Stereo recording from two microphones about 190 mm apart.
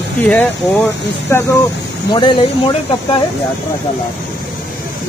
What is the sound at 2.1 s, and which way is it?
Speech, 25° left (ahead or behind).